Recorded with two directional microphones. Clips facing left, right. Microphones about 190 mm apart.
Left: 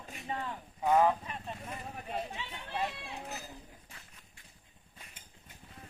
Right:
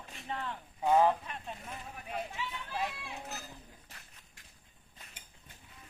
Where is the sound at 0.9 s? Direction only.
5° right (ahead or behind).